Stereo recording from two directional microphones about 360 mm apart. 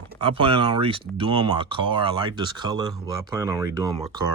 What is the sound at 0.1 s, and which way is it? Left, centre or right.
Speech, centre.